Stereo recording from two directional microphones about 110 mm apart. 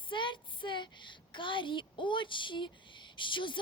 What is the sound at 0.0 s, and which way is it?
A woman's voice, 45° left (ahead or behind).